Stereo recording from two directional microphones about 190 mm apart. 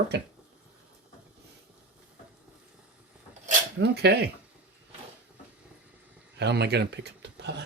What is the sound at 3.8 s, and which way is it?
Speech, 60° right (ahead or behind).